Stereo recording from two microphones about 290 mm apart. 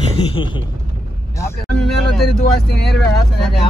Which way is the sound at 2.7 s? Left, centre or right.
Left.